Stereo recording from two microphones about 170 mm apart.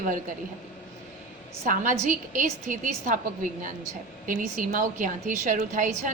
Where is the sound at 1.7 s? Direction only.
50° right (ahead or behind).